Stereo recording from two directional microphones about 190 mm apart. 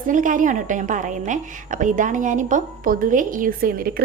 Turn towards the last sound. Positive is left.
turn(degrees=-50)  # may be behind; listen again after turning